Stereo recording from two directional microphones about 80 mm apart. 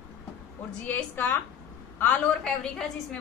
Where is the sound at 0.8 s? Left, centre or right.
Left.